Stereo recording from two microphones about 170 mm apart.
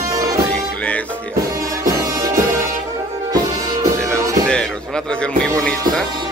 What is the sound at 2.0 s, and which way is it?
Music, 20° right (ahead or behind).